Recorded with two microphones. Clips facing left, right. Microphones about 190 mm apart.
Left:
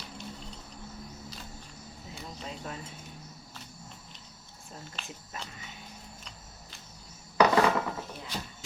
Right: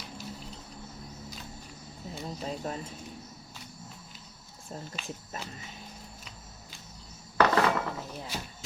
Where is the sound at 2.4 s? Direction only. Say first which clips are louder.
Right 5 dB; 35° right (ahead or behind).